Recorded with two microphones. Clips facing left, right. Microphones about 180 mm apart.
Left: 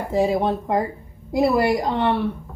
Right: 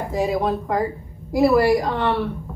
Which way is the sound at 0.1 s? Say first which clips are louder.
Left 2 dB; 30° left (ahead or behind).